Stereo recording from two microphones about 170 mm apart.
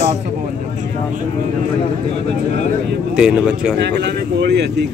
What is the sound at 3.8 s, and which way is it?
Speech, 80° right.